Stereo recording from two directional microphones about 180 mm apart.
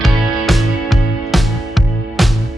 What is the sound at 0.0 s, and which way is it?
Music, centre (ahead or behind).